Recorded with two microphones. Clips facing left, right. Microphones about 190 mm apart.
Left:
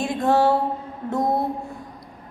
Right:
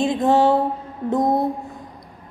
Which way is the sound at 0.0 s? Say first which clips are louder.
Right 3 dB; 20° right (ahead or behind).